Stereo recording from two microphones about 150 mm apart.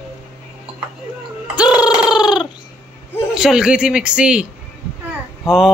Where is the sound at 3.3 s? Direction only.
5° right (ahead or behind).